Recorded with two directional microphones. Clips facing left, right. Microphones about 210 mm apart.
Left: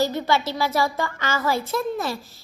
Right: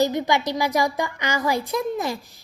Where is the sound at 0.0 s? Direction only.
15° right (ahead or behind).